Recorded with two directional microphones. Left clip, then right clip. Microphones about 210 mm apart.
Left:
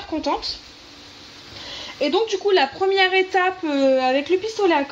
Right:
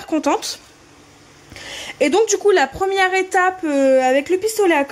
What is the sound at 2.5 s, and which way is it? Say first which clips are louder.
Speech: right 2 dB; 35° right (ahead or behind).